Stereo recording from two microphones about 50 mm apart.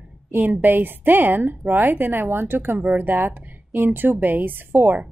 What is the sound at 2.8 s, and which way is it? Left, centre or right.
A woman's voice, right.